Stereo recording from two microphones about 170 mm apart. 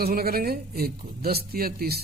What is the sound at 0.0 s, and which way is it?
Speech, 65° right (ahead or behind).